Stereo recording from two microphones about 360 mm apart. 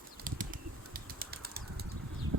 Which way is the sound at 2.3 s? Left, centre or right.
Right.